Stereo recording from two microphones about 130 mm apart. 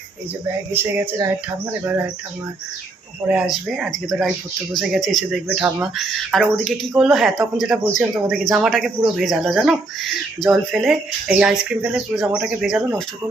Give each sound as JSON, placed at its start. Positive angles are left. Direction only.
{"t": 0.8, "sound": "speech", "side_deg": -15}
{"t": 3.2, "sound": "speech", "side_deg": -5}
{"t": 5.5, "sound": "speech", "side_deg": -15}
{"t": 5.8, "sound": "speech", "side_deg": 0}